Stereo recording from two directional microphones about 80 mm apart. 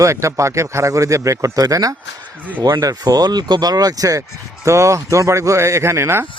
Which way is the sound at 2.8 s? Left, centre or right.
Right.